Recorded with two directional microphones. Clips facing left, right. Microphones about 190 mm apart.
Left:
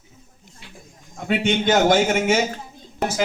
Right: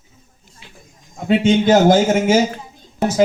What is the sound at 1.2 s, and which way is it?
Speech, 30° right (ahead or behind).